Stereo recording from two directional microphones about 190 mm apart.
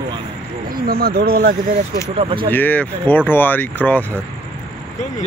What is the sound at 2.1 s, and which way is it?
Speech, 25° right (ahead or behind).